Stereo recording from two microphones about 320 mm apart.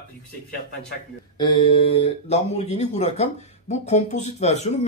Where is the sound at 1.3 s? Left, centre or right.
Centre.